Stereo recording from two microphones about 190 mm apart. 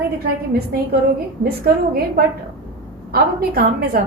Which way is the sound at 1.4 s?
50° right (ahead or behind).